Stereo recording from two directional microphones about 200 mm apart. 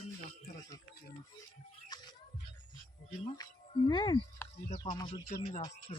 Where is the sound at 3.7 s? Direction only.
25° left (ahead or behind).